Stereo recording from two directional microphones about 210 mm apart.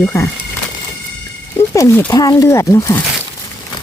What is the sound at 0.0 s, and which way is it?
Speech, 15° left (ahead or behind).